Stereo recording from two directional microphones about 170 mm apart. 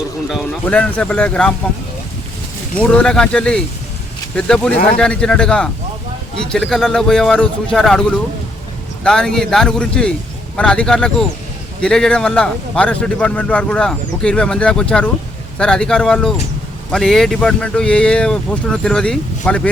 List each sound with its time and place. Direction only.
0.6 s speech: 10° left (ahead or behind)
2.7 s a man's voice: 5° left (ahead or behind)